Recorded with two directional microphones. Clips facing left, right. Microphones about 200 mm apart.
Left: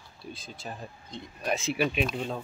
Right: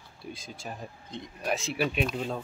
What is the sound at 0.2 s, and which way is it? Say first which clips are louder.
Speech: right 1 dB; 15° right (ahead or behind).